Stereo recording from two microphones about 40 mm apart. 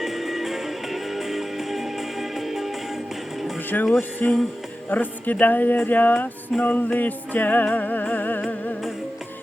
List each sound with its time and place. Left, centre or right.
0.0 s music: centre
3.7 s music: left